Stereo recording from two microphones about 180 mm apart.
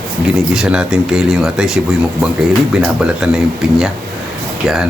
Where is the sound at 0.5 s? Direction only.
5° right (ahead or behind).